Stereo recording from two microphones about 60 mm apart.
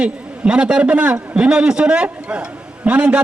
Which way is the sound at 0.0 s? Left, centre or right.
Centre.